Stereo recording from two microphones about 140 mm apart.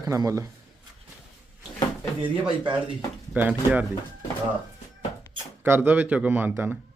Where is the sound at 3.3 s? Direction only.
10° right (ahead or behind).